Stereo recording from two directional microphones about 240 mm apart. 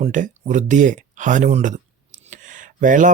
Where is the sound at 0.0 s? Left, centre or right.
Right.